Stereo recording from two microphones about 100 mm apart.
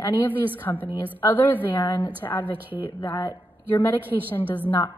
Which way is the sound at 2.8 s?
60° left (ahead or behind).